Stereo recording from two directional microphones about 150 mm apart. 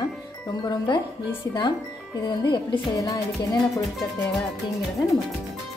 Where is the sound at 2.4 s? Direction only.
20° left (ahead or behind).